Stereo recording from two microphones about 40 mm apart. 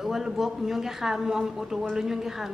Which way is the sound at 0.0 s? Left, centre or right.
Centre.